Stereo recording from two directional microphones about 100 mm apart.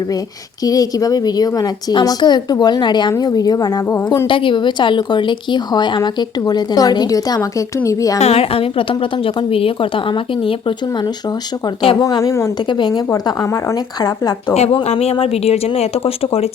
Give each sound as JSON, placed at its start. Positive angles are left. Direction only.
{"t": 0.6, "sound": "a woman's voice", "side_deg": 35}
{"t": 3.9, "sound": "a woman's voice", "side_deg": 25}
{"t": 4.3, "sound": "a woman's voice", "side_deg": 60}
{"t": 8.2, "sound": "a woman's voice", "side_deg": 85}
{"t": 12.2, "sound": "a woman's voice", "side_deg": 30}
{"t": 12.6, "sound": "a woman's voice", "side_deg": 50}
{"t": 13.2, "sound": "a woman's voice", "side_deg": 30}
{"t": 14.5, "sound": "speech", "side_deg": 90}